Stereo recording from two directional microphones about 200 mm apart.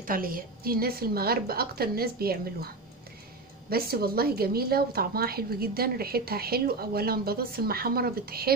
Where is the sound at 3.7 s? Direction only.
50° right (ahead or behind).